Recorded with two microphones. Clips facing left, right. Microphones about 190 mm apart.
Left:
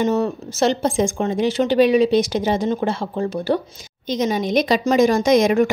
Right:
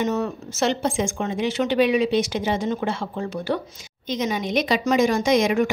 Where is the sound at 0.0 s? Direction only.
30° left (ahead or behind).